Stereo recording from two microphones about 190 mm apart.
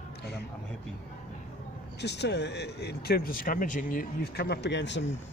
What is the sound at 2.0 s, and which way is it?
Speech, 65° left (ahead or behind).